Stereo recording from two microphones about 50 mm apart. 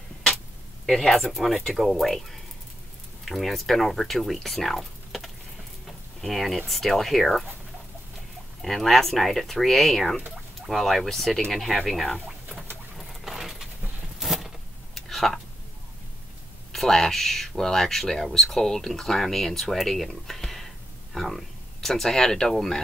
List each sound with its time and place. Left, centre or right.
0.9 s speech: centre
3.3 s speech: centre
5.9 s a sound: centre
6.7 s speech: centre
8.6 s speech: centre
12.9 s patter: centre
14.2 s a sound: centre
16.7 s speech: centre